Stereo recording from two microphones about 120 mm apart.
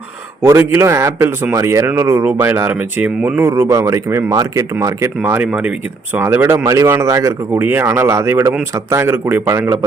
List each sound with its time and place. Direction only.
0.4 s speech: 20° right (ahead or behind)
6.1 s speech: 20° right (ahead or behind)